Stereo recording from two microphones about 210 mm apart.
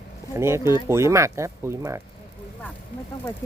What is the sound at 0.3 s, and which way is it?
Speech, 10° right (ahead or behind).